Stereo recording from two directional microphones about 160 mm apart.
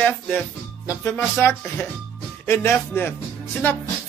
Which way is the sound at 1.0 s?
15° left (ahead or behind).